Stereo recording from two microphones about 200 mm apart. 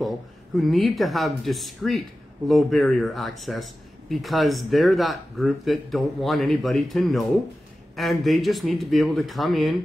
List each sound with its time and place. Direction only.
0.6 s speech: centre (ahead or behind)